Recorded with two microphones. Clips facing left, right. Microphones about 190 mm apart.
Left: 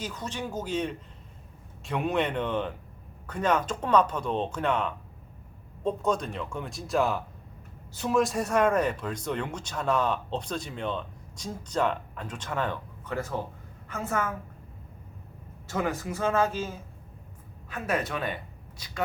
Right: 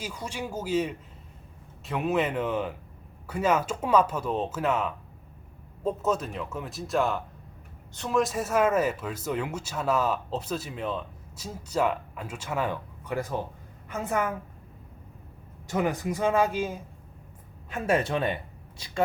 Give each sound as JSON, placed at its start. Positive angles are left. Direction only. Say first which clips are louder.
{"t": 0.0, "sound": "speech", "louder": "even", "side_deg": -10}
{"t": 15.6, "sound": "speech", "louder": "right 3 dB", "side_deg": -15}
{"t": 17.7, "sound": "speech", "louder": "right 4 dB", "side_deg": -25}